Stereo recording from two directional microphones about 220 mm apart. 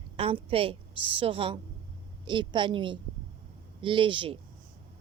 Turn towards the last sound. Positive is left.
turn(degrees=-25)  # may be behind; listen again after turning